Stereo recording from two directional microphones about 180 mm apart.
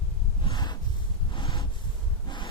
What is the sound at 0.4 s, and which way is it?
Snort, 25° left (ahead or behind).